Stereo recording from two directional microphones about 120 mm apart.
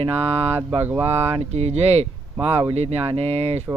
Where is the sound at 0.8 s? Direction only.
15° right (ahead or behind).